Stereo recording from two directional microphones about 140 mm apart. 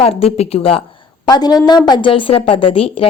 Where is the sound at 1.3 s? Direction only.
30° left (ahead or behind).